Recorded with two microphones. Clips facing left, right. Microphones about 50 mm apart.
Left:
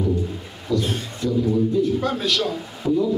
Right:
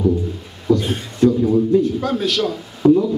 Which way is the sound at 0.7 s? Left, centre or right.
Right.